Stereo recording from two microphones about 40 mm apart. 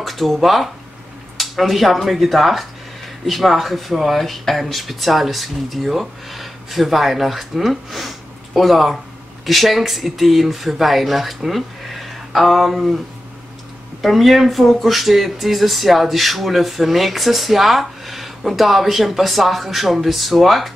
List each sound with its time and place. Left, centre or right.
0.0 s speech: centre
14.0 s speech: centre